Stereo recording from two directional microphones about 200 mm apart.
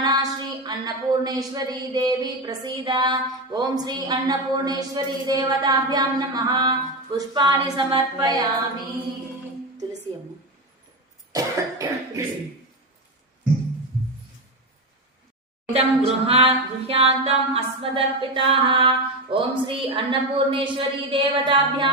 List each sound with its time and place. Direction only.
0.0 s a woman's voice: 20° right (ahead or behind)
11.3 s cough: 15° right (ahead or behind)
15.7 s a woman's voice: 30° right (ahead or behind)